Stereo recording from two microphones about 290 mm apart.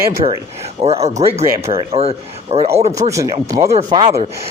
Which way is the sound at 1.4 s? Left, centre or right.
Centre.